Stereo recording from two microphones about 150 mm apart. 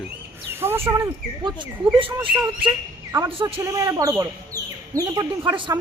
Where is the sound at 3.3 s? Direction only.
40° right (ahead or behind).